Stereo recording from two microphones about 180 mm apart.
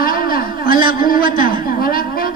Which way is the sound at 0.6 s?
25° right (ahead or behind).